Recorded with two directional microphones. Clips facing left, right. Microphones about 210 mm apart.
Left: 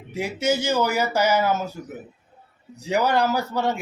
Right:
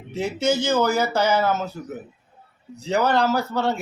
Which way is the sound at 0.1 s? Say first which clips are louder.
Right 1 dB; 10° left (ahead or behind).